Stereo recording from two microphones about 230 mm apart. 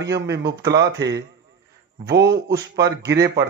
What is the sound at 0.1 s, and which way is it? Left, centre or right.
A man's voice, right.